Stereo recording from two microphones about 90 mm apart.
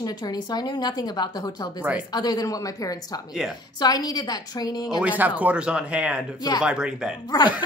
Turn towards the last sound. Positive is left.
turn(degrees=50)  # may be behind; listen again after turning